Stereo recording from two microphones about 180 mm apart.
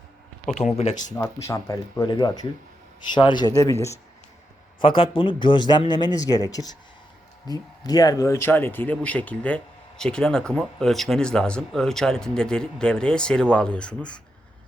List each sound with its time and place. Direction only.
0.4 s speech: 40° left (ahead or behind)
1.1 s a man's voice: 15° left (ahead or behind)
4.8 s a man's voice: 30° left (ahead or behind); by 14.2 s 5° left (ahead or behind)